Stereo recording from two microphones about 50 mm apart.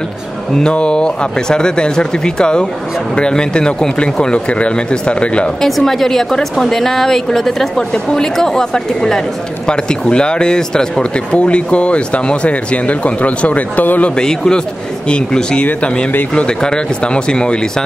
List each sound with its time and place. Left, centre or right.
0.6 s a woman's voice: centre
5.6 s a woman's voice: centre; by 14.1 s left
14.1 s a woman's voice: centre